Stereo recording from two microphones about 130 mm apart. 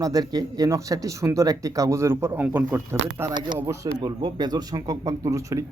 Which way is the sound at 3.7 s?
25° right (ahead or behind).